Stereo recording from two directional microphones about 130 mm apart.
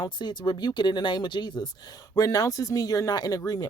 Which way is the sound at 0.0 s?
35° left (ahead or behind).